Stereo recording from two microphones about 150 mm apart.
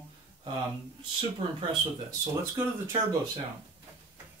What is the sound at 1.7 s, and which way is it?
Speech, 25° right (ahead or behind).